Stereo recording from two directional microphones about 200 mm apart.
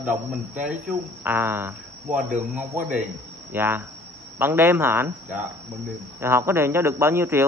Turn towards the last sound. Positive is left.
turn(degrees=-15)  # may be behind; listen again after turning